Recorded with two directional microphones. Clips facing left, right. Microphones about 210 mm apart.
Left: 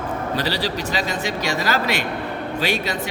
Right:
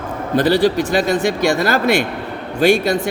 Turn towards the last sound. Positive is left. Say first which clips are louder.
# right 9 dB
turn(degrees=-50)  # may be behind; listen again after turning